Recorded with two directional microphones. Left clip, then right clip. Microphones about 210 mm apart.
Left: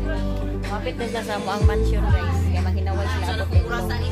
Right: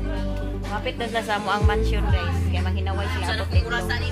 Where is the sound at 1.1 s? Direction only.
35° right (ahead or behind).